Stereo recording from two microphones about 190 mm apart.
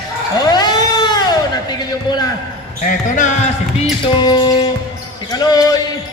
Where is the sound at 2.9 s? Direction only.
40° left (ahead or behind).